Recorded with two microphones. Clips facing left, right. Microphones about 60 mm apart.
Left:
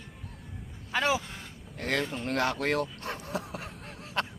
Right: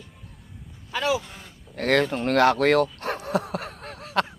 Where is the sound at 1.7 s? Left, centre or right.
Right.